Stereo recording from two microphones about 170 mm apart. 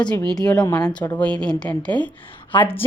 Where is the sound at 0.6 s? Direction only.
20° left (ahead or behind).